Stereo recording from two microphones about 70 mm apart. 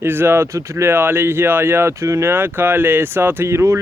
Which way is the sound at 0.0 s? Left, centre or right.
Right.